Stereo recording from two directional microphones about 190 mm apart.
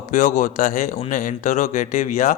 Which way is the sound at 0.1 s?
40° left (ahead or behind).